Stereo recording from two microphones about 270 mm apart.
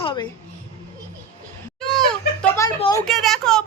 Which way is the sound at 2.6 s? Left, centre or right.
Centre.